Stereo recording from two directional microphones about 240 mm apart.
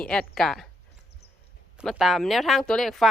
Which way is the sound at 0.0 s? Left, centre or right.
Centre.